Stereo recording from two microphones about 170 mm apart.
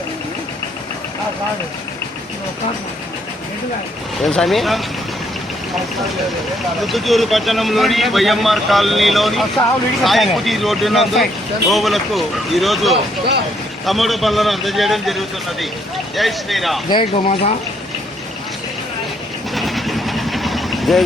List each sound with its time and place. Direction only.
4.2 s speech: centre (ahead or behind)
6.8 s speech: centre (ahead or behind)
16.9 s speech: 35° left (ahead or behind)
19.5 s vehicle: centre (ahead or behind)